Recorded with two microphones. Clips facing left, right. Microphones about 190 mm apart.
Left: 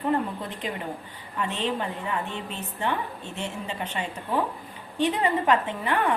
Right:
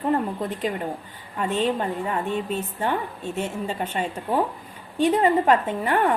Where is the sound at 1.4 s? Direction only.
45° right (ahead or behind).